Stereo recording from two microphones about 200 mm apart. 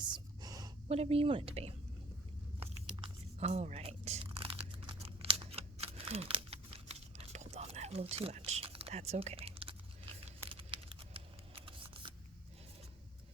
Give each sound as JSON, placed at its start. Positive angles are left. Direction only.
{"t": 0.0, "sound": "gasp", "side_deg": -20}
{"t": 3.4, "sound": "crumpling", "side_deg": -35}
{"t": 10.5, "sound": "scissors", "side_deg": -25}